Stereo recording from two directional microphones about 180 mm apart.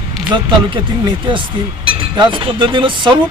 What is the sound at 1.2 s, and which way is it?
Speech, 30° right (ahead or behind).